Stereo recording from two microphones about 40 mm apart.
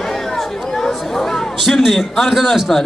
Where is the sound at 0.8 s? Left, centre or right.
Centre.